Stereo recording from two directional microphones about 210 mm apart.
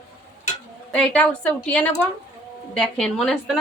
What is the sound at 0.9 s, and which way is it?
A woman's voice, 5° left (ahead or behind).